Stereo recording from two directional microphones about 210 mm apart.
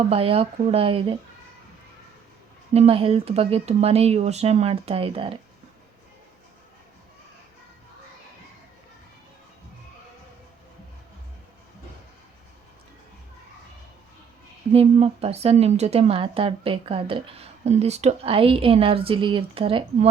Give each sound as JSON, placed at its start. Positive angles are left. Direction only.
{"t": 0.1, "sound": "a woman's voice", "side_deg": -25}
{"t": 2.7, "sound": "a woman's voice", "side_deg": -30}
{"t": 14.7, "sound": "a woman's voice", "side_deg": -30}